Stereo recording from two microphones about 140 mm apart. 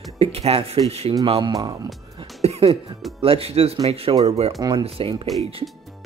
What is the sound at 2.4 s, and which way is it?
Cough, 45° right (ahead or behind).